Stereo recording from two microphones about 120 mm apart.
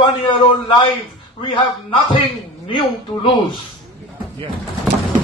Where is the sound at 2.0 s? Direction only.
40° left (ahead or behind).